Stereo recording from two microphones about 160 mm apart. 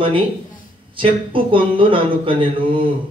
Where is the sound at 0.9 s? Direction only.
35° right (ahead or behind).